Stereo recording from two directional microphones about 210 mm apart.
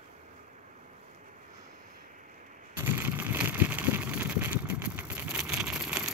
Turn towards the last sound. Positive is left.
turn(degrees=-5)  # may be behind; listen again after turning